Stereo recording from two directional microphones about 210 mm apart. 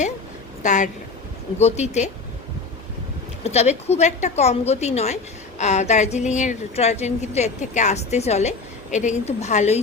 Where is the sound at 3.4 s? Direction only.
30° left (ahead or behind).